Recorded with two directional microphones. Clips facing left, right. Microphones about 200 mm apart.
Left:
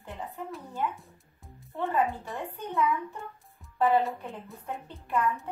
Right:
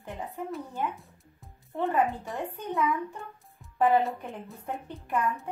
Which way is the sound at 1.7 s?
15° right (ahead or behind).